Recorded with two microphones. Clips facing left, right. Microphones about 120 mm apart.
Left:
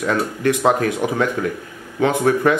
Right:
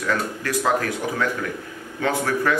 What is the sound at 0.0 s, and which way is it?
Speech, 25° left (ahead or behind).